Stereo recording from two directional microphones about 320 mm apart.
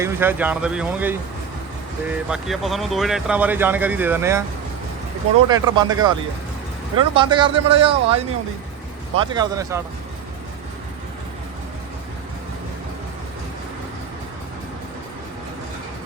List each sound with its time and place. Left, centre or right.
0.0 s speech: centre
2.3 s speech: centre
5.5 s speech: centre